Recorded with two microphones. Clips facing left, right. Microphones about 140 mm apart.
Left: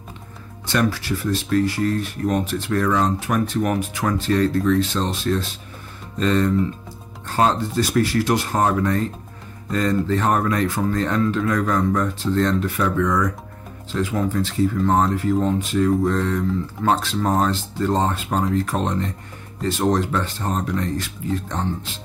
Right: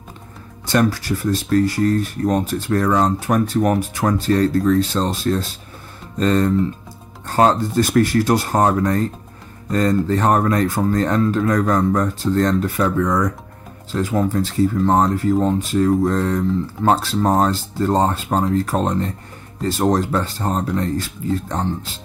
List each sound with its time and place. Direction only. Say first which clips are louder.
0.7 s speech: right 3 dB; 40° right (ahead or behind)